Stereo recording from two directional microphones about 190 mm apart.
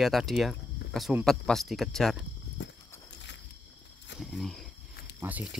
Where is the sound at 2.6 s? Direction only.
70° left (ahead or behind).